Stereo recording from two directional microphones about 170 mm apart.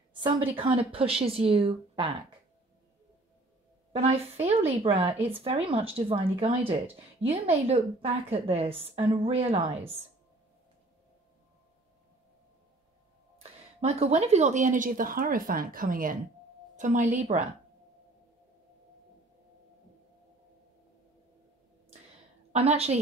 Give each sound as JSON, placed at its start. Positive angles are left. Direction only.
{"t": 0.1, "sound": "speech", "side_deg": -30}
{"t": 3.9, "sound": "speech", "side_deg": -35}
{"t": 13.4, "sound": "a woman's voice", "side_deg": -40}
{"t": 22.5, "sound": "a woman's voice", "side_deg": -40}